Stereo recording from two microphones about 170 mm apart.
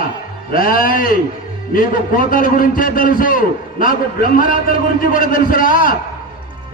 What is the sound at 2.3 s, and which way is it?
A man's voice, 55° left (ahead or behind).